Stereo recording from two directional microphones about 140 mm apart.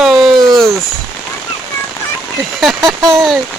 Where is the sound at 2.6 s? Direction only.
Centre (ahead or behind).